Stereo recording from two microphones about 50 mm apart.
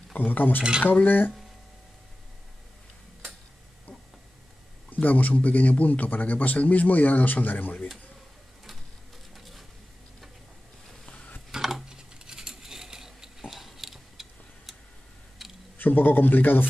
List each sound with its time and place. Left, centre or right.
0.2 s a man's voice: left
4.8 s a man's voice: left
9.3 s a sound: centre
11.5 s a sound: centre
15.4 s tick: centre
15.8 s a man's voice: left